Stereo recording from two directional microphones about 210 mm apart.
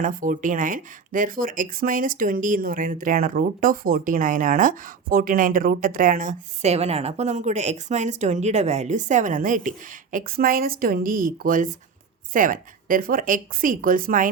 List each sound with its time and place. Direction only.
0.0 s speech: 40° right (ahead or behind)